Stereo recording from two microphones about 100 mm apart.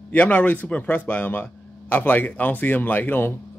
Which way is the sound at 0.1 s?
20° left (ahead or behind).